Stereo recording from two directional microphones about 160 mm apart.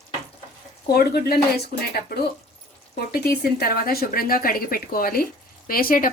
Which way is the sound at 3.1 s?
70° left (ahead or behind).